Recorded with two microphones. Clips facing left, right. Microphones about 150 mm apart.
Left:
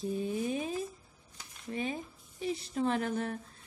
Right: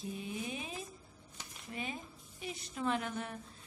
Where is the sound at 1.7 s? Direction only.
30° left (ahead or behind).